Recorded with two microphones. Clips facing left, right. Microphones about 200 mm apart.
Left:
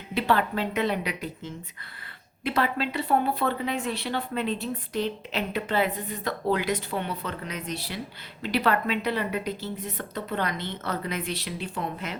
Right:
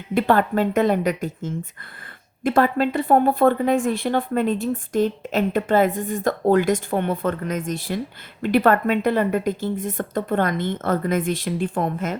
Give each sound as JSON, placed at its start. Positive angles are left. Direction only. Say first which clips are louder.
{"t": 0.1, "sound": "a woman's voice", "louder": "right 6 dB", "side_deg": -50}